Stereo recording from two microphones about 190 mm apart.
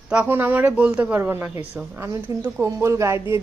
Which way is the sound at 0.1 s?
10° right (ahead or behind).